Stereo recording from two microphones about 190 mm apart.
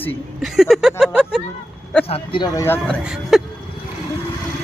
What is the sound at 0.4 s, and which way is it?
Speech, centre (ahead or behind).